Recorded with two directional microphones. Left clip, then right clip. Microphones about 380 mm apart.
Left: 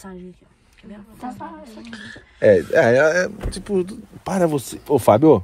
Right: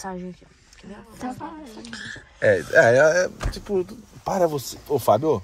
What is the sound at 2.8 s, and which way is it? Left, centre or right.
Speech, left.